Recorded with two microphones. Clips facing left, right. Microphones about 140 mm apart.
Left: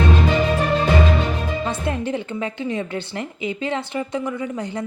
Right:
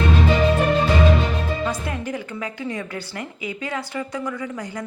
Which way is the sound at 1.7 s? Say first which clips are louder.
Left 4 dB; 25° left (ahead or behind).